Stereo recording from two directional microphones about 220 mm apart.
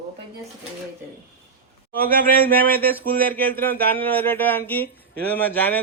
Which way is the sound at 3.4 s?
40° right (ahead or behind).